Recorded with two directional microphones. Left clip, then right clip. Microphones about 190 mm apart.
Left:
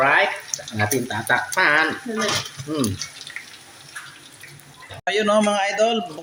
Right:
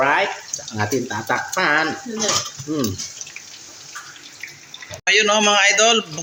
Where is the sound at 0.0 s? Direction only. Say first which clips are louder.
Even; 10° right (ahead or behind).